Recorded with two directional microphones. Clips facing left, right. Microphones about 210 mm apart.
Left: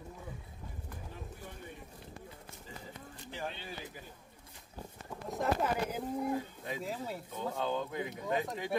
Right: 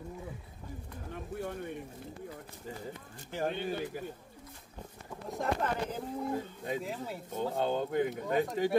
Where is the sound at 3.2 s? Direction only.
55° right (ahead or behind).